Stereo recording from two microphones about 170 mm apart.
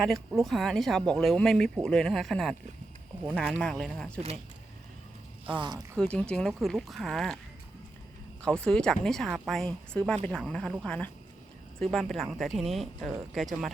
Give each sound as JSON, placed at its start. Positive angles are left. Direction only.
{"t": 0.0, "sound": "speech", "side_deg": 0}
{"t": 3.6, "sound": "speech", "side_deg": 5}
{"t": 5.5, "sound": "speech", "side_deg": -25}
{"t": 6.0, "sound": "speech", "side_deg": 5}
{"t": 8.6, "sound": "speech", "side_deg": 5}